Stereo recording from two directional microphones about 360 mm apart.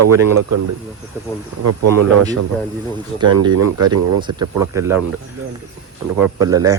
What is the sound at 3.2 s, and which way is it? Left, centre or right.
Speech, right.